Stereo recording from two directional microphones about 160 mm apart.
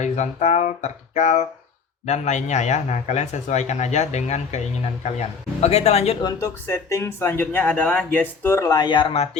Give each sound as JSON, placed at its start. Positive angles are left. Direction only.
{"t": 0.0, "sound": "speech", "side_deg": 45}
{"t": 6.2, "sound": "speech", "side_deg": 20}